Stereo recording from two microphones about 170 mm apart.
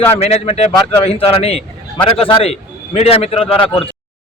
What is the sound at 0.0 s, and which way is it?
A man's voice, 35° left (ahead or behind).